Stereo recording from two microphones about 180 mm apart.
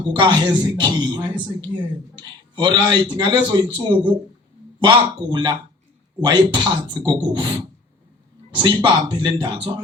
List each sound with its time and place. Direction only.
0.0 s a man's voice: 25° right (ahead or behind)